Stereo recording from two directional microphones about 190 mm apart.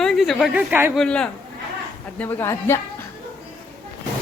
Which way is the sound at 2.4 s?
15° left (ahead or behind).